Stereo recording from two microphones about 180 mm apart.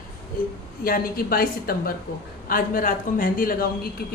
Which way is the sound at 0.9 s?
55° left (ahead or behind).